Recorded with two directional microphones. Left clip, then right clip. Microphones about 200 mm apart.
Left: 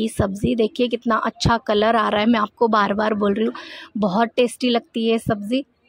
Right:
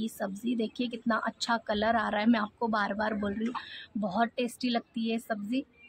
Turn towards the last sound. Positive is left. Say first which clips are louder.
# left 11 dB
turn(degrees=35)  # may be behind; listen again after turning